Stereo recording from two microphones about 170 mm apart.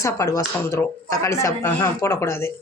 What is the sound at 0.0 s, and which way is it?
Speech, 20° left (ahead or behind).